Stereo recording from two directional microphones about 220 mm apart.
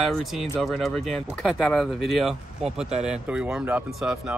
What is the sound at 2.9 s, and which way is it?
Speech, 30° right (ahead or behind).